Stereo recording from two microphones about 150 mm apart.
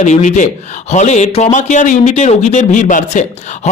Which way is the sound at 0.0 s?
55° left (ahead or behind).